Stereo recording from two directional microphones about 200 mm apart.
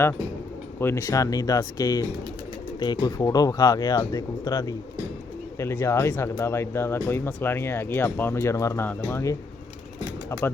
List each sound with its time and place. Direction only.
0.8 s speech: 15° left (ahead or behind)